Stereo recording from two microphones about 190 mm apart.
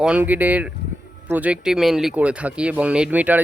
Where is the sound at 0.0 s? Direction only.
5° right (ahead or behind).